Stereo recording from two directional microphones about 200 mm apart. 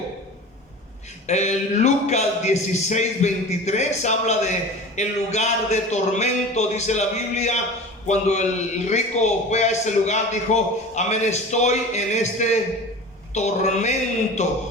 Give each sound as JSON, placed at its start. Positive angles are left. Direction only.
{"t": 1.3, "sound": "a man's voice", "side_deg": 35}